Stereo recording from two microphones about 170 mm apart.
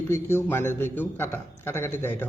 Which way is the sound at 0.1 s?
15° left (ahead or behind).